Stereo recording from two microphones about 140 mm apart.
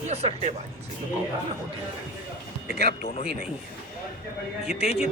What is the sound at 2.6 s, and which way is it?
Speech, 75° left (ahead or behind).